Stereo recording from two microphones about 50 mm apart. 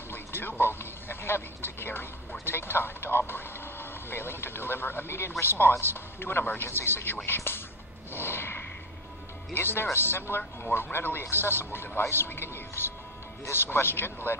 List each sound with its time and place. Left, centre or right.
0.1 s a sound: left
2.4 s a man's voice: left
8.1 s whip: left
9.5 s a man's voice: left